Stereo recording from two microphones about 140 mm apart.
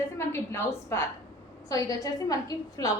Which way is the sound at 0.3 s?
20° left (ahead or behind).